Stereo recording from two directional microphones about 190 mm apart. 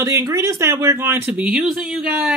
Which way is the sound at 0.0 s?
15° right (ahead or behind).